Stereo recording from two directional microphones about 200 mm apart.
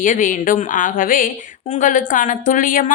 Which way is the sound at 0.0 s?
40° left (ahead or behind).